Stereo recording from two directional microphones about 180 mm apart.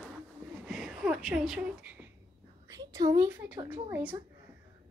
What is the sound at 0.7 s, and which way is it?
Speech, centre (ahead or behind).